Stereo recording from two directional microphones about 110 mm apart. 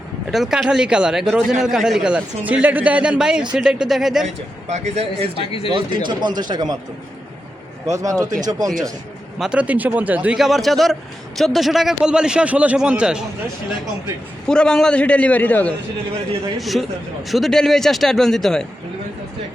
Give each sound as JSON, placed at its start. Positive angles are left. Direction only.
{"t": 0.3, "sound": "a man's voice", "side_deg": -5}
{"t": 4.7, "sound": "a man's voice", "side_deg": -80}
{"t": 5.6, "sound": "speech", "side_deg": -50}
{"t": 7.9, "sound": "speech", "side_deg": -30}
{"t": 9.4, "sound": "a man's voice", "side_deg": -10}
{"t": 10.3, "sound": "a man's voice", "side_deg": 0}
{"t": 14.4, "sound": "a man's voice", "side_deg": 5}
{"t": 16.6, "sound": "speech", "side_deg": 0}